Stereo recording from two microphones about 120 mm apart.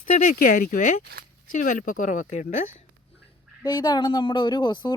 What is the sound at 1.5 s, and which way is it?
Speech, 90° left.